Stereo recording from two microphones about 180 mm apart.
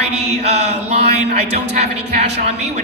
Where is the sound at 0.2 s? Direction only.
35° right (ahead or behind).